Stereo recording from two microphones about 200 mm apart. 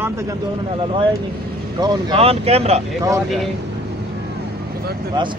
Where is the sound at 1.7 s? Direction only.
25° right (ahead or behind).